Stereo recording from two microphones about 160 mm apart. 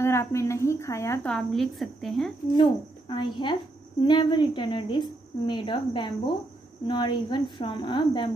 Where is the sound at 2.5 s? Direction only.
30° left (ahead or behind).